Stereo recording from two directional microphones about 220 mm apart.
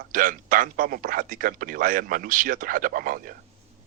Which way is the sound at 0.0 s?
40° right (ahead or behind).